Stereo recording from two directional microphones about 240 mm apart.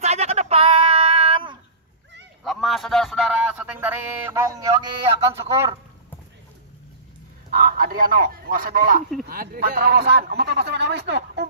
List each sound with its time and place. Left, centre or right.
0.0 s a sound: right
2.4 s a man's voice: centre
7.5 s a man's voice: right